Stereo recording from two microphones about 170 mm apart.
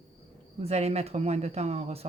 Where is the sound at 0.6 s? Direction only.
40° right (ahead or behind).